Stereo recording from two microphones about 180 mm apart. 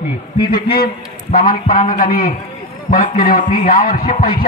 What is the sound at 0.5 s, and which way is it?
A man's voice, 55° left (ahead or behind).